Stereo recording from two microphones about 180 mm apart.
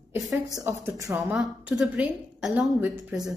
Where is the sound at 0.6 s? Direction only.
15° right (ahead or behind).